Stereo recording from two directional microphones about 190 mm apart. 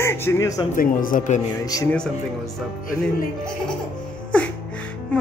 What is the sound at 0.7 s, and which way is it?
Speech, 45° left (ahead or behind).